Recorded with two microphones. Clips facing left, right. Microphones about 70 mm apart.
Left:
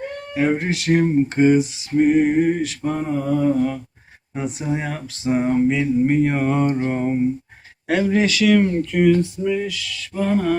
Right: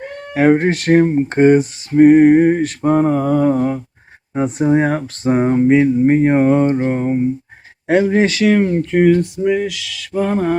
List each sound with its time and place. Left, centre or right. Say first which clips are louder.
0.5 s a sound: right 7 dB; right
5.5 s mantra: right 6 dB; right
6.9 s speech: right 3 dB; centre
7.9 s mantra: right 5 dB; right
8.2 s music: right 3 dB; right
9.4 s speech: right 5 dB; right
10.1 s music: right 3 dB; right